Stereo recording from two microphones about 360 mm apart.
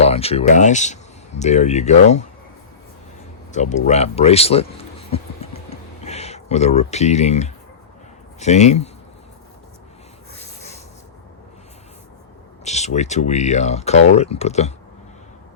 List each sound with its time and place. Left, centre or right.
0.0 s speech: centre
3.5 s speech: centre
12.6 s speech: centre